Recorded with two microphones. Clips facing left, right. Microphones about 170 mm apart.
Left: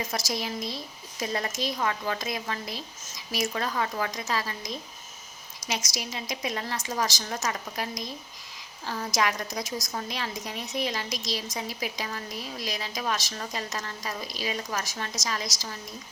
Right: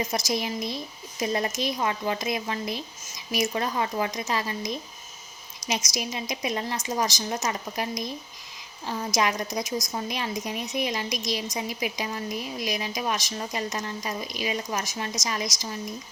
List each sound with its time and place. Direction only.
0.0 s a woman's voice: 20° right (ahead or behind)